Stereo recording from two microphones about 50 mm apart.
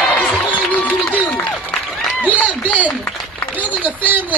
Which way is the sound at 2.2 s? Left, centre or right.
Left.